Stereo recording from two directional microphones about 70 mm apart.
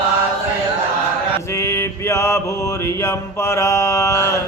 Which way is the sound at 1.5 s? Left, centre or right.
Left.